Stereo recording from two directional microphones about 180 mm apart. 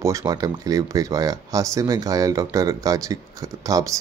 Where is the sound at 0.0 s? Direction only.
20° right (ahead or behind).